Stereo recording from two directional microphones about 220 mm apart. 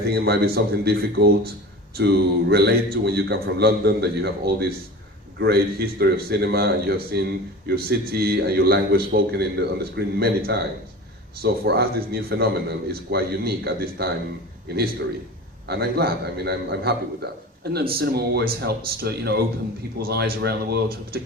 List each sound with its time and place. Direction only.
0.1 s a man's voice: 45° right (ahead or behind)
15.6 s a man's voice: 45° right (ahead or behind)
17.9 s a man's voice: 45° right (ahead or behind)